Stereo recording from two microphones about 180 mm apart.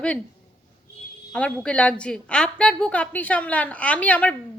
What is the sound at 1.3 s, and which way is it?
A woman's voice, 5° left (ahead or behind).